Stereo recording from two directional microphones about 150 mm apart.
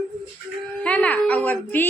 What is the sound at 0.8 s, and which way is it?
A woman's voice, 10° left (ahead or behind).